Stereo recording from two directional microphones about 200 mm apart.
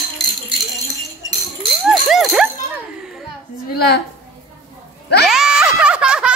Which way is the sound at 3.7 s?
50° left (ahead or behind).